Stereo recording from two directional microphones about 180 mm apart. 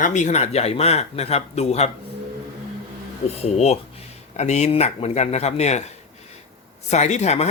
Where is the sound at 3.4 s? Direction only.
35° left (ahead or behind).